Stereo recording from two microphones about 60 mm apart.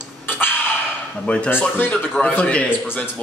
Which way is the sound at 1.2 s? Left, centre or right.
Centre.